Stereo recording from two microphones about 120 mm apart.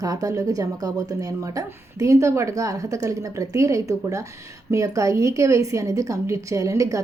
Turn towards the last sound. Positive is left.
turn(degrees=-25)  # may be behind; listen again after turning